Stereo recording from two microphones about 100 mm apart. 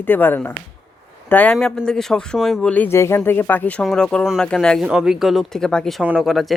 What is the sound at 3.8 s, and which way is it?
Speech, 5° left (ahead or behind).